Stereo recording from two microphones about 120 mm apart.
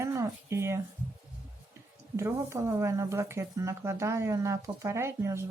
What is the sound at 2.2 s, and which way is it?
Speech, 20° right (ahead or behind).